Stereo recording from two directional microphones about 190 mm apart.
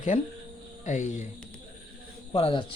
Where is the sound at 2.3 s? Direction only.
30° left (ahead or behind).